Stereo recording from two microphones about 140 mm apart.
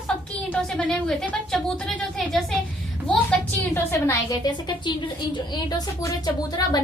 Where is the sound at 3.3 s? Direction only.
15° left (ahead or behind).